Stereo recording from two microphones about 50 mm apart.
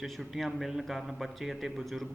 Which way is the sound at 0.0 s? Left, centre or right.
Centre.